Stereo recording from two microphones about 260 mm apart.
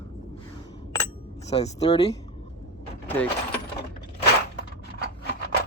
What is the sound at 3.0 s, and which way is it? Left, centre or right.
Vehicle, centre.